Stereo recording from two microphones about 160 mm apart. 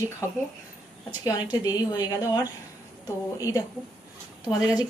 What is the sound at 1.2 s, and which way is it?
Speech, 25° left (ahead or behind).